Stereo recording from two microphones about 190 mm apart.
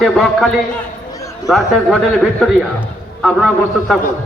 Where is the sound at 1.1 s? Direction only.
15° left (ahead or behind).